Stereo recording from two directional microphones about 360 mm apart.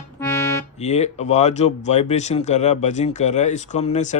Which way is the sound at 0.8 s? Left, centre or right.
Centre.